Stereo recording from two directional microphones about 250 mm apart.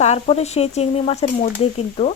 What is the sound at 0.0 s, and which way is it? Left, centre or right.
Speech, left.